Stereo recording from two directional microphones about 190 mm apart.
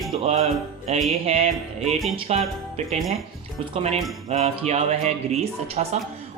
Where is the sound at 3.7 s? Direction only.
35° right (ahead or behind).